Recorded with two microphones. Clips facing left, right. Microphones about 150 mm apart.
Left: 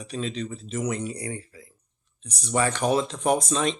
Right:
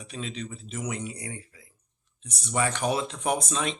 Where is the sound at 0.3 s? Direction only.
35° left (ahead or behind).